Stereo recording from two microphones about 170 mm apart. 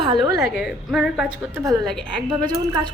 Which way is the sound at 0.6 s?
Centre (ahead or behind).